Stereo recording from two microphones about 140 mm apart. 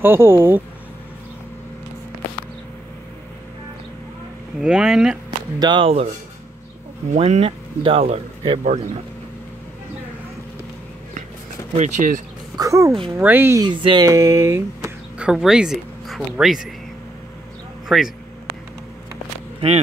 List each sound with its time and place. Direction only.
0.0 s speech: 15° right (ahead or behind)
4.6 s speech: 5° right (ahead or behind)
5.6 s a sound: 35° right (ahead or behind)
7.1 s speech: 50° right (ahead or behind)
8.6 s speech: 55° right (ahead or behind)
11.7 s speech: 60° right (ahead or behind)
12.5 s speech: 20° right (ahead or behind)
13.7 s a sound: 35° right (ahead or behind)
14.1 s speech: 20° right (ahead or behind)
15.1 s speech: 5° right (ahead or behind)
17.8 s speech: centre (ahead or behind)